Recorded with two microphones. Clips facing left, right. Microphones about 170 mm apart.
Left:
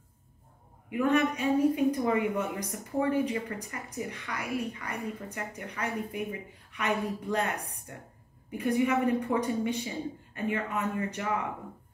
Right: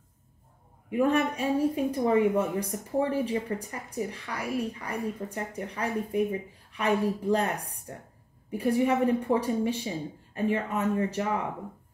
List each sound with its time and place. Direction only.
0.8 s a woman's voice: 30° right (ahead or behind)